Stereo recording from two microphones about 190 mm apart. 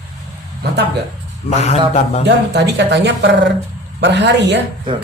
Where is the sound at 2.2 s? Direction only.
65° right (ahead or behind).